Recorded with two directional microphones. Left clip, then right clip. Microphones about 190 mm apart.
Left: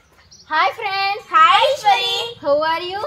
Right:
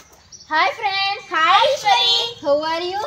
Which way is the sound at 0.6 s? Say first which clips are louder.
Left 1 dB; centre (ahead or behind).